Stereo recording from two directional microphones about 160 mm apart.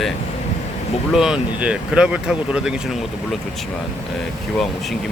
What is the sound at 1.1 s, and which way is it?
Speech, 5° right (ahead or behind).